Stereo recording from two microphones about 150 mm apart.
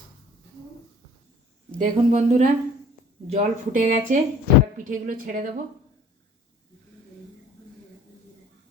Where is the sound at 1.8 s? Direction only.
55° right (ahead or behind).